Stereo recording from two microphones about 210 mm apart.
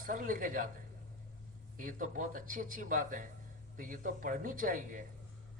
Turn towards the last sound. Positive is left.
turn(degrees=-40)  # may be behind; listen again after turning